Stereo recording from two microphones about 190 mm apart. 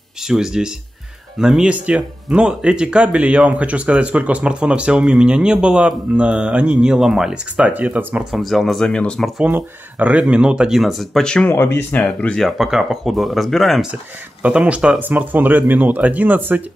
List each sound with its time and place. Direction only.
0.2 s speech: centre (ahead or behind)
9.4 s speech: 10° right (ahead or behind)